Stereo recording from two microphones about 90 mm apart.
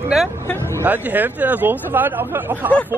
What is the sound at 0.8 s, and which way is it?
Speech, 20° right (ahead or behind).